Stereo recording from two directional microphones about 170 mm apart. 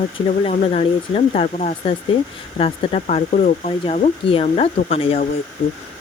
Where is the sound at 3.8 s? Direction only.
30° left (ahead or behind).